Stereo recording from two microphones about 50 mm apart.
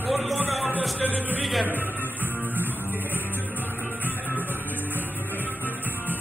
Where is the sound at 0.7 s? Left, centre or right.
Right.